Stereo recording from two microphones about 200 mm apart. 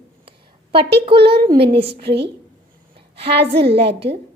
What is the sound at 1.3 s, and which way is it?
Speech, 55° right (ahead or behind).